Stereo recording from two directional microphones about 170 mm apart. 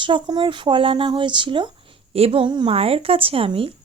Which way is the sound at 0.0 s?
30° right (ahead or behind).